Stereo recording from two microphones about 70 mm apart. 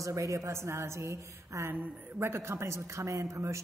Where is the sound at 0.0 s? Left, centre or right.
Right.